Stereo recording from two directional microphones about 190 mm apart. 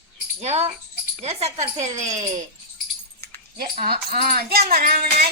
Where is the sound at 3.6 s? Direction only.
50° right (ahead or behind).